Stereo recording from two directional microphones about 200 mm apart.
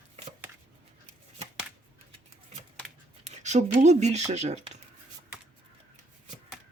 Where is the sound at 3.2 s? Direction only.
35° right (ahead or behind).